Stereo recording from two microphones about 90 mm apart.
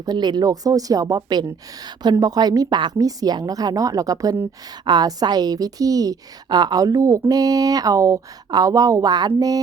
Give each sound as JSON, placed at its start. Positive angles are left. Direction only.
{"t": 0.0, "sound": "a woman's voice", "side_deg": -50}
{"t": 4.9, "sound": "a woman's voice", "side_deg": -50}